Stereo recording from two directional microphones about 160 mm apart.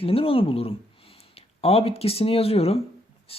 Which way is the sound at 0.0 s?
35° left (ahead or behind).